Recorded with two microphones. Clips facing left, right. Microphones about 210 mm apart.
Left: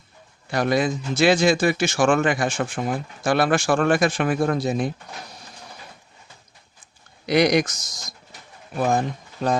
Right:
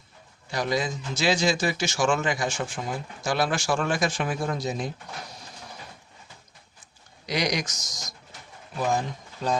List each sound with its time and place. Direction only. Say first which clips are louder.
0.5 s a man's voice: left 6 dB; 60° left (ahead or behind)
7.3 s a man's voice: left 9 dB; 60° left (ahead or behind)